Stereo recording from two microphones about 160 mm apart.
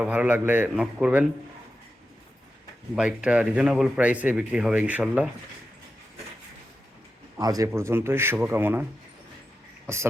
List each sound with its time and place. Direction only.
0.0 s speech: 10° right (ahead or behind)
2.9 s speech: 5° right (ahead or behind)
7.3 s speech: 20° right (ahead or behind)
9.8 s beatboxing: 15° right (ahead or behind)